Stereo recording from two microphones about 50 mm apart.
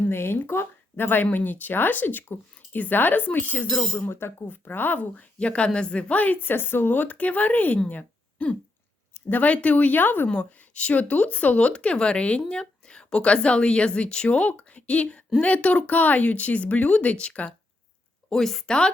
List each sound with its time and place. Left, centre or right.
0.1 s speech: left
5.1 s speech: left
7.9 s a sound: left
9.3 s speech: left
10.2 s a woman's voice: left
18.3 s speech: centre